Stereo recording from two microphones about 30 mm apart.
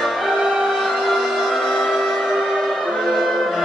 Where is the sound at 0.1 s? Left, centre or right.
Centre.